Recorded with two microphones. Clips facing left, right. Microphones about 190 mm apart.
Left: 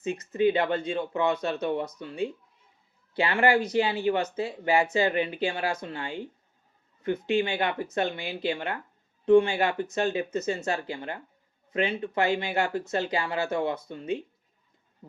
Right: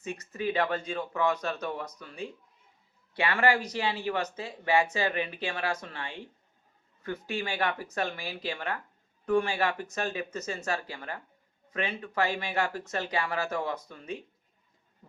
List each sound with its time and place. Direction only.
0.0 s speech: 25° left (ahead or behind)